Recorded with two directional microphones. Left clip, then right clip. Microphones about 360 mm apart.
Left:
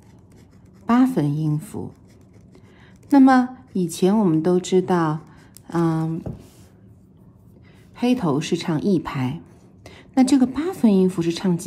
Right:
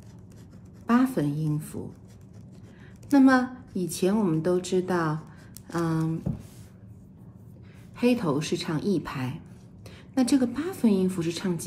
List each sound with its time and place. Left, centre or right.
0.8 s a woman's voice: left
3.1 s a woman's voice: left
7.9 s a woman's voice: left